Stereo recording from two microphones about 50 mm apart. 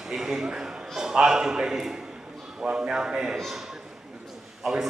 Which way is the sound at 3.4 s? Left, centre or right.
Centre.